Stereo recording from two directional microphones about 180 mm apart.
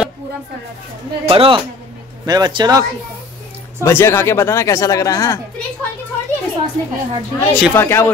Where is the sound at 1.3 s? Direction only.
30° right (ahead or behind).